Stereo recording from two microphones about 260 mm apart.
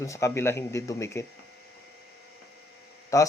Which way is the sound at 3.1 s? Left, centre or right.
Centre.